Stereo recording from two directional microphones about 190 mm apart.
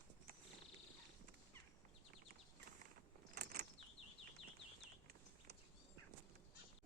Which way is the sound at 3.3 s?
55° right (ahead or behind).